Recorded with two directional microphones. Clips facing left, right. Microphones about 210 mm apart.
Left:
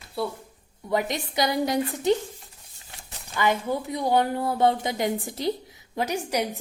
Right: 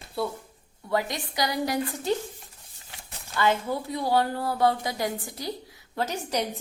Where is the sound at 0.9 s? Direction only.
20° left (ahead or behind).